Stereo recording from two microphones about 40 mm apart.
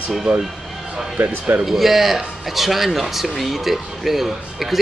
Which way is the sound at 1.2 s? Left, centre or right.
Right.